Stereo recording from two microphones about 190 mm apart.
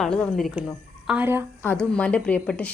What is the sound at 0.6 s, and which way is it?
Speech, 5° right (ahead or behind).